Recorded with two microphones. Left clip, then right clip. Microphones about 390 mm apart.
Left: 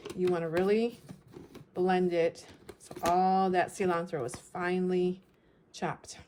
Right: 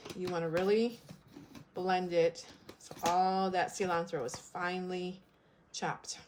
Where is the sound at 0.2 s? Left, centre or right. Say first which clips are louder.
Left 4 dB; centre.